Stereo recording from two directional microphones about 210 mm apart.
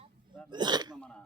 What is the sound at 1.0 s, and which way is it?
Speech, 5° left (ahead or behind).